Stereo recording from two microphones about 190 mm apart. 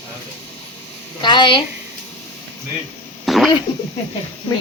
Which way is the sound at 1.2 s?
25° left (ahead or behind).